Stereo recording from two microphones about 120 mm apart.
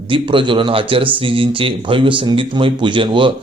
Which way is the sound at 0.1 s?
45° right (ahead or behind).